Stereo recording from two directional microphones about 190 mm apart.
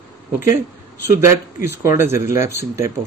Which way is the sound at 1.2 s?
15° right (ahead or behind).